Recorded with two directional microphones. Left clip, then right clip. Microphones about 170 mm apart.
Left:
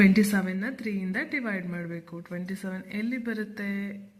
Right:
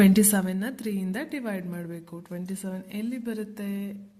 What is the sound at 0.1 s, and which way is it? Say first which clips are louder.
A woman's voice: right 2 dB; 35° right (ahead or behind).